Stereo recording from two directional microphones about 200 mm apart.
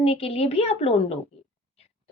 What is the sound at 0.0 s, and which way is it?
Speech, 30° left (ahead or behind).